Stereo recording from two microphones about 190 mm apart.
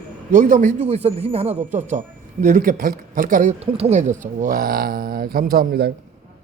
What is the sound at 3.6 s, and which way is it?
Speech, 30° right (ahead or behind).